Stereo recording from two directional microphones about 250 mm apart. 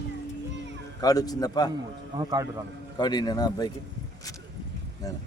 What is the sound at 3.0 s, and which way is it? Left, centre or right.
Speech, centre.